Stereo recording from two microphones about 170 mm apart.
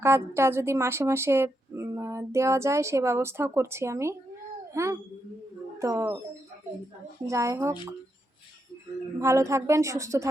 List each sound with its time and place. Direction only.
0.0 s a woman's voice: 15° right (ahead or behind)
7.3 s a woman's voice: 15° right (ahead or behind)
9.1 s a woman's voice: 15° right (ahead or behind)